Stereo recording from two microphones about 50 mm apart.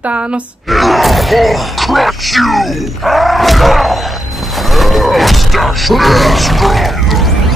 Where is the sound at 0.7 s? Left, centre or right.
Centre.